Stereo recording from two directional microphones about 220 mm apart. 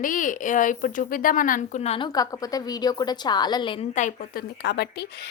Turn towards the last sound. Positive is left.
turn(degrees=50)  # may be behind; listen again after turning